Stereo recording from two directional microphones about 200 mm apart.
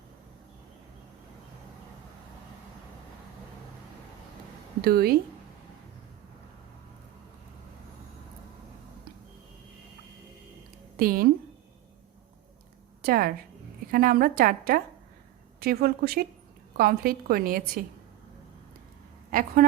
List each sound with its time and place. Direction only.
4.8 s a woman's voice: 50° right (ahead or behind)
10.9 s speech: 45° right (ahead or behind)
13.0 s a woman's voice: 45° right (ahead or behind)
19.3 s a woman's voice: 45° right (ahead or behind)